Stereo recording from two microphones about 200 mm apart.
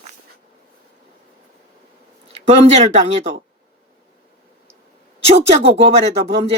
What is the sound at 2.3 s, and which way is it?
Speech, 35° right (ahead or behind).